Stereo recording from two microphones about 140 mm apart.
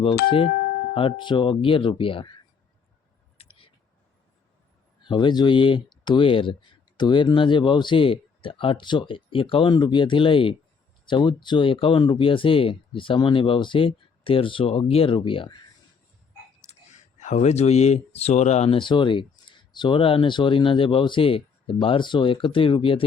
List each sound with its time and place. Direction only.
0.0 s speech: 40° left (ahead or behind)
3.3 s a sound: 40° left (ahead or behind)
5.0 s speech: 35° left (ahead or behind)
16.6 s speech: 60° left (ahead or behind)
18.8 s speech: 35° left (ahead or behind)